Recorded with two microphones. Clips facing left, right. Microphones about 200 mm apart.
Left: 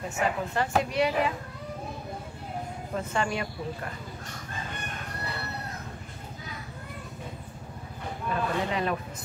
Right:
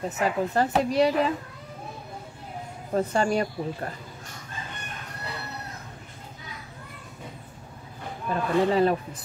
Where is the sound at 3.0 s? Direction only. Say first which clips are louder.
Right 6 dB; 40° right (ahead or behind).